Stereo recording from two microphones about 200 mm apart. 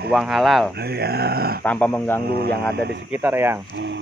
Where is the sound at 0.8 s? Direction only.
55° right (ahead or behind).